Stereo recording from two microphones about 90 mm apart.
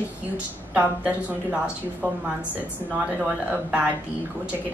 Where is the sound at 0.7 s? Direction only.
15° right (ahead or behind).